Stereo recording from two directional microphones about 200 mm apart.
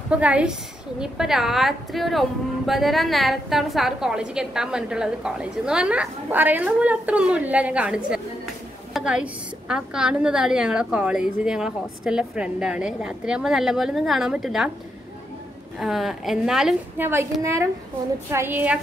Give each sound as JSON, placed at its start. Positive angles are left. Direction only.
{"t": 0.1, "sound": "a woman's voice", "side_deg": -5}
{"t": 15.8, "sound": "a woman's voice", "side_deg": 0}